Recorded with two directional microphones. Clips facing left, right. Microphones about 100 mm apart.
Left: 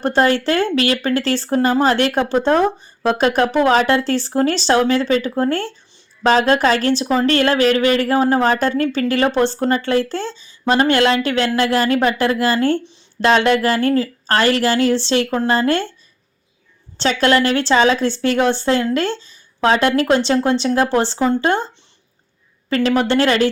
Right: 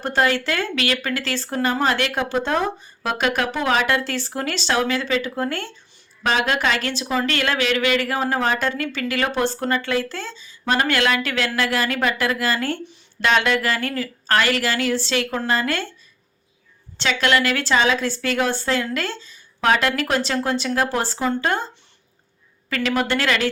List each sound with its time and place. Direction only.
0.0 s speech: 30° left (ahead or behind)
17.0 s a woman's voice: 35° left (ahead or behind)
22.7 s speech: 30° left (ahead or behind)